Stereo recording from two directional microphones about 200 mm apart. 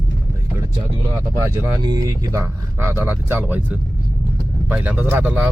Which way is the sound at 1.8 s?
20° right (ahead or behind).